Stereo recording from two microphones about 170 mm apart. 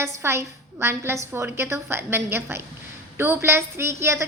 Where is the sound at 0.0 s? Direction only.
15° right (ahead or behind).